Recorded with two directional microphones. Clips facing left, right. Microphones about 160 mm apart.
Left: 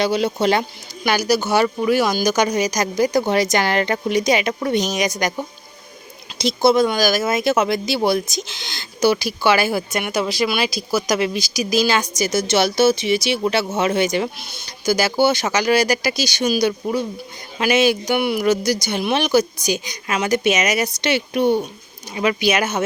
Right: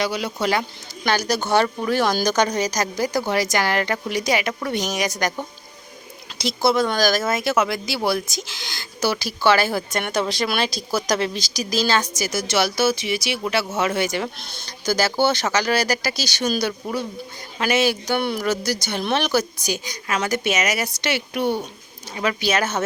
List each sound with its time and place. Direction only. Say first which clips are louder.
0.0 s speech: left 5 dB; 25° left (ahead or behind)
1.0 s speech: left 3 dB; 5° left (ahead or behind)
14.3 s speech: left 1 dB; 5° left (ahead or behind)